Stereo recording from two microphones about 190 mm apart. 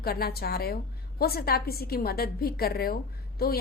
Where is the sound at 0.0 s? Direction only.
55° left (ahead or behind).